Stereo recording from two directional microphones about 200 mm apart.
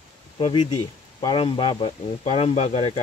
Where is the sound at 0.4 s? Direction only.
25° left (ahead or behind).